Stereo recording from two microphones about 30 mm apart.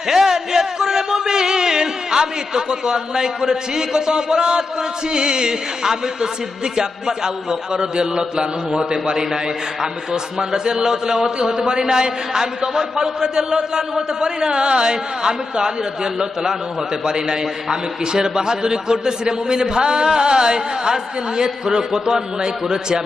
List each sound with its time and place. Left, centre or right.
0.1 s a sound: centre
5.1 s a man's voice: right
7.7 s a man's voice: right